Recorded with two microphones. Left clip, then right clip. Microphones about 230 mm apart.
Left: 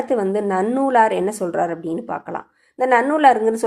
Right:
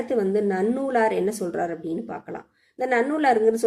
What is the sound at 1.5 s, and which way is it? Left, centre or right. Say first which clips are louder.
Speech: left 6 dB; left.